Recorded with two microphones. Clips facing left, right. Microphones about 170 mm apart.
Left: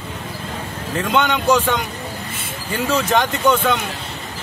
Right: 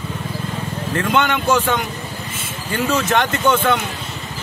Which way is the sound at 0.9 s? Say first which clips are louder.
Even; 15° left (ahead or behind).